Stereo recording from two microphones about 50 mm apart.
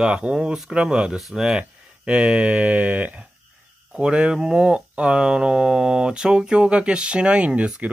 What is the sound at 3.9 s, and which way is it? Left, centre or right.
Speech, centre.